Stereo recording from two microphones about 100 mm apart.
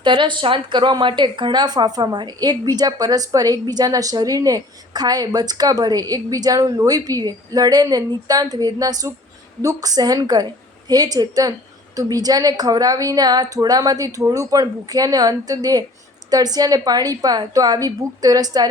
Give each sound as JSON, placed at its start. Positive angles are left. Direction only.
{"t": 0.0, "sound": "speech", "side_deg": -55}